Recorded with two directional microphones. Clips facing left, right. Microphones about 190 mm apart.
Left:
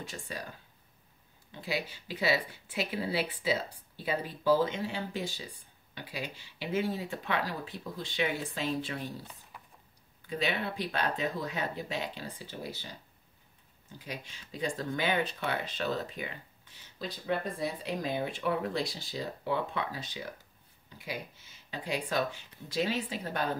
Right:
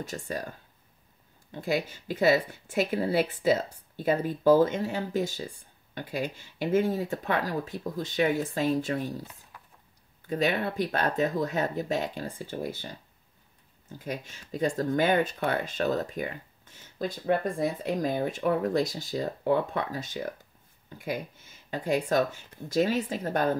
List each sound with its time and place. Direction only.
0.0 s speech: 45° right (ahead or behind)
10.2 s speech: 45° right (ahead or behind)
13.9 s speech: 50° right (ahead or behind)